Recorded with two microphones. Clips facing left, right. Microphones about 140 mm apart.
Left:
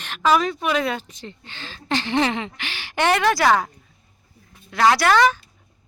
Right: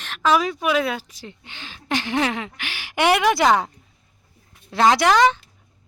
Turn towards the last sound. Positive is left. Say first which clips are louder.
# right 1 dB
turn(degrees=-20)  # may be behind; listen again after turning